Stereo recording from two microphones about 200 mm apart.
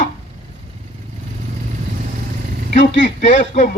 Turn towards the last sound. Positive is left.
turn(degrees=40)  # may be behind; listen again after turning